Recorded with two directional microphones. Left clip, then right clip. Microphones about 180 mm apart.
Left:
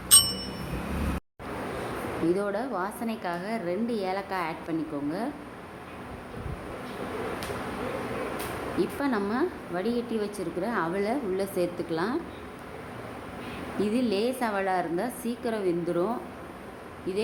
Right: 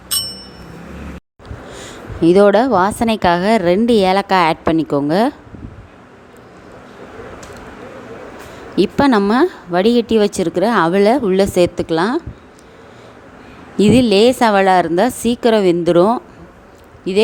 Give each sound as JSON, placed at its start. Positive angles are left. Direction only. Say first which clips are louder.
{"t": 0.1, "sound": "bicycle bell", "louder": "even", "side_deg": 0}
{"t": 2.2, "sound": "a woman's voice", "louder": "right 19 dB", "side_deg": -50}
{"t": 8.8, "sound": "a woman's voice", "louder": "right 16 dB", "side_deg": -55}
{"t": 13.7, "sound": "a woman's voice", "louder": "right 16 dB", "side_deg": -50}